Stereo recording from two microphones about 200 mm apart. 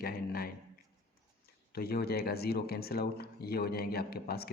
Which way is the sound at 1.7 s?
50° left (ahead or behind).